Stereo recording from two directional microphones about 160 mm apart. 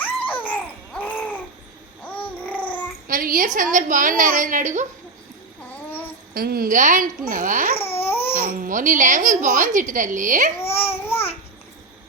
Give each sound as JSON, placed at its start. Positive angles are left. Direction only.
{"t": 0.0, "sound": "babbling", "side_deg": 10}
{"t": 3.1, "sound": "a woman's voice", "side_deg": -60}
{"t": 5.6, "sound": "a sound", "side_deg": 10}
{"t": 6.3, "sound": "a woman's voice", "side_deg": -70}
{"t": 8.0, "sound": "a sound", "side_deg": 15}
{"t": 8.5, "sound": "a woman's voice", "side_deg": -55}
{"t": 10.8, "sound": "babbling", "side_deg": 15}